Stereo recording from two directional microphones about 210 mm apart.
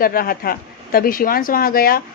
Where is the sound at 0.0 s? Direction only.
45° left (ahead or behind).